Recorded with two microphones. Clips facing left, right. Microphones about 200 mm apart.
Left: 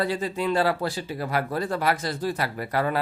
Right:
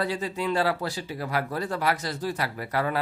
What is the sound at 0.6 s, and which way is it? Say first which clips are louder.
Speech: left 2 dB; 50° left (ahead or behind).